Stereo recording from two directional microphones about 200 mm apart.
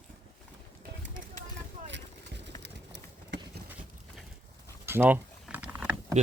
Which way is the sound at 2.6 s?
60° right (ahead or behind).